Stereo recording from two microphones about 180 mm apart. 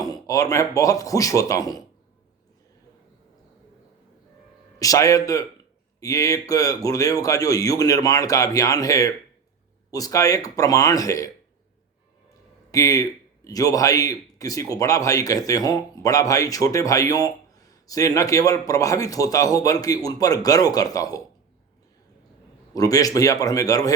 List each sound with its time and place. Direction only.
0.0 s a man's voice: 20° left (ahead or behind)
4.8 s a man's voice: 20° left (ahead or behind)
12.7 s a man's voice: 20° left (ahead or behind)
22.7 s a man's voice: 20° left (ahead or behind)